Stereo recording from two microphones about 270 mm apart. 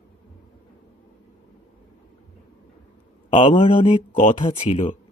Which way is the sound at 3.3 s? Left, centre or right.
Centre.